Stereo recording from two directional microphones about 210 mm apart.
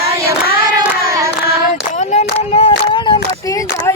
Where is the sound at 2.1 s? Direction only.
30° left (ahead or behind).